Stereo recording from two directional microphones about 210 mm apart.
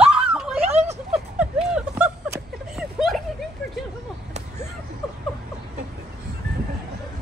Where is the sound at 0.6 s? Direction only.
30° right (ahead or behind).